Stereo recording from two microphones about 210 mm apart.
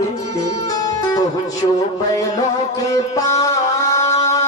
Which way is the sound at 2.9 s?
15° left (ahead or behind).